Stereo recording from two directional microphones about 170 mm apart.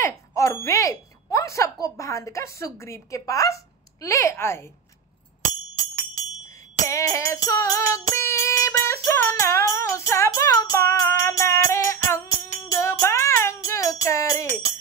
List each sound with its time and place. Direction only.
0.0 s speech: 15° left (ahead or behind)
6.4 s music: 20° left (ahead or behind)